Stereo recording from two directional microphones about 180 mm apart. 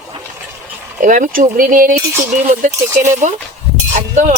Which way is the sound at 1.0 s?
45° right (ahead or behind).